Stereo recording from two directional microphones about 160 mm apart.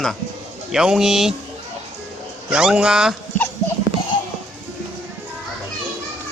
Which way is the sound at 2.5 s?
5° right (ahead or behind).